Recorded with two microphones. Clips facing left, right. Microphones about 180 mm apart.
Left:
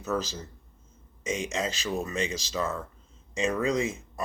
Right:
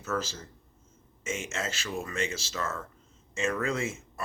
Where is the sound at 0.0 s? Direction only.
15° left (ahead or behind).